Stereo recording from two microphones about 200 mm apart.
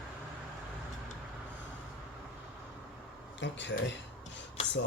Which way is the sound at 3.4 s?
65° left (ahead or behind).